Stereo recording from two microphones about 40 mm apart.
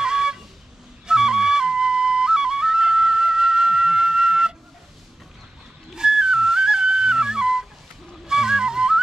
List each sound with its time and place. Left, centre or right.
0.0 s a sound: centre
1.0 s flute: centre
5.9 s music: centre
8.3 s flute: centre